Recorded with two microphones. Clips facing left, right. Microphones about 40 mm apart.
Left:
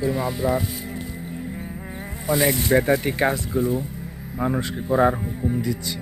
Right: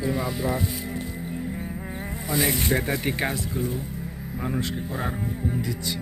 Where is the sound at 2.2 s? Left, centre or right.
Centre.